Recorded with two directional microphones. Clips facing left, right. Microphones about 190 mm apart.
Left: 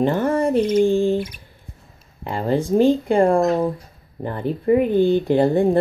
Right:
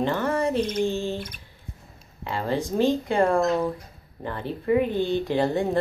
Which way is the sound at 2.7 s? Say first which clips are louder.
Left 7 dB; 15° left (ahead or behind).